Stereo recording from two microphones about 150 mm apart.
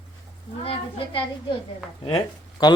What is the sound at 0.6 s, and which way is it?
A woman's voice, 35° left (ahead or behind).